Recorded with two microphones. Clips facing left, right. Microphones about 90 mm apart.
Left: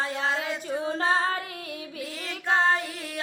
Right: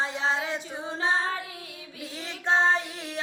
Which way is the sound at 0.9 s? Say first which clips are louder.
Left 1 dB; 55° left (ahead or behind).